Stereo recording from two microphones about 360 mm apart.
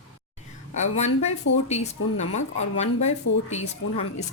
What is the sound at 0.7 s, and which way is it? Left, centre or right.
Speech, centre.